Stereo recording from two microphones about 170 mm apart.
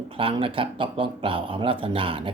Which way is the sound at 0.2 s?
30° right (ahead or behind).